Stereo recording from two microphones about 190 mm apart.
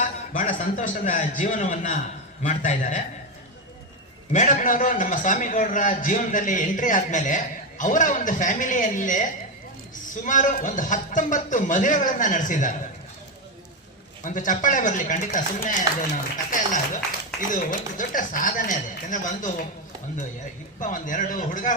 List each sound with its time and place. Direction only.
0.3 s a man's voice: 40° left (ahead or behind)
4.3 s a man's voice: 40° left (ahead or behind)
10.2 s a man's voice: 40° left (ahead or behind)
14.3 s a man's voice: 40° left (ahead or behind)
16.5 s music: 45° left (ahead or behind)
17.5 s a man's voice: 45° left (ahead or behind)
20.7 s a man's voice: 40° left (ahead or behind)